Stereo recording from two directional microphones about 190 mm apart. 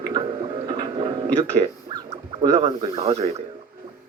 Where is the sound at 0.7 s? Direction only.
25° right (ahead or behind).